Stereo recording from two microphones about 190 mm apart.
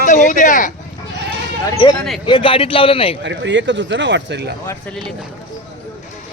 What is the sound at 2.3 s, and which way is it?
Speech, 30° left (ahead or behind).